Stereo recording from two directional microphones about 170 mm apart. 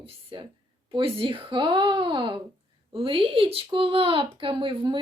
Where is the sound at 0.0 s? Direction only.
30° right (ahead or behind).